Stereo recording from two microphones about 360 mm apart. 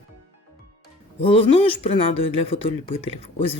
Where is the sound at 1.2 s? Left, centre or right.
Centre.